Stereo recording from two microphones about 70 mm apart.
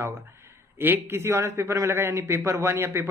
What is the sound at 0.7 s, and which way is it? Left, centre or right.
A man's voice, right.